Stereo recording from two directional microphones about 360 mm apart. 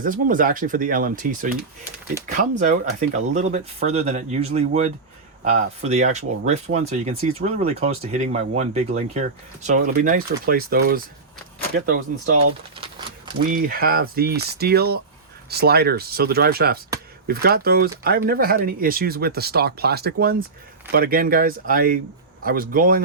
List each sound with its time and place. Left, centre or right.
0.0 s speech: right